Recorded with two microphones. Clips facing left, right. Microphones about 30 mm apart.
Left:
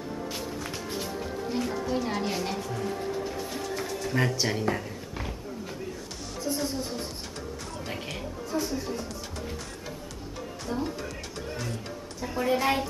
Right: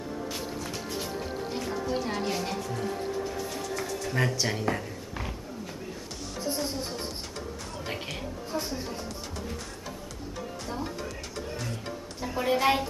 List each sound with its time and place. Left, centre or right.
1.5 s a sound: centre
2.0 s a woman's voice: centre
3.5 s music: centre
6.4 s speech: right
7.7 s speech: centre
8.5 s speech: right
10.7 s speech: centre
11.5 s music: centre
12.4 s a woman's voice: centre